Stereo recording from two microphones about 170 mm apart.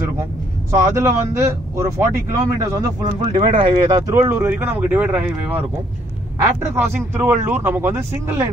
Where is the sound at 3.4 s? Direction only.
30° right (ahead or behind); by 8.5 s 15° right (ahead or behind).